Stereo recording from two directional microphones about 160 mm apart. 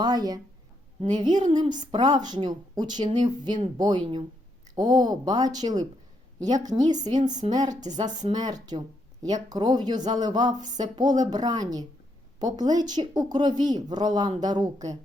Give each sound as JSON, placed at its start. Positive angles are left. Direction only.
{"t": 0.0, "sound": "speech", "side_deg": -25}
{"t": 1.5, "sound": "speech", "side_deg": -30}